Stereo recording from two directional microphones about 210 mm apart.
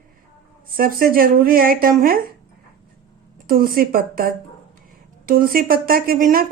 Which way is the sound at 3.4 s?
45° right (ahead or behind).